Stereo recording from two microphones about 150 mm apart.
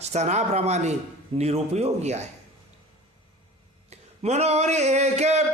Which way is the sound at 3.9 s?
45° right (ahead or behind).